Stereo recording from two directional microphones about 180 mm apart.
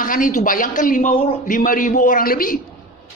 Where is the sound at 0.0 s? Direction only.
45° left (ahead or behind).